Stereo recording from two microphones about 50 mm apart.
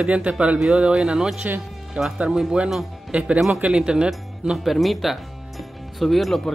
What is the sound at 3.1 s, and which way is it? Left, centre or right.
Speech, right.